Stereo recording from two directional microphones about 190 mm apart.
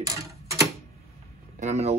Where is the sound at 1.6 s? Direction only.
35° right (ahead or behind).